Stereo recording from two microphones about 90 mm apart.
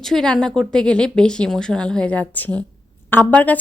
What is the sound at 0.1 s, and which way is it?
Speech, 5° left (ahead or behind).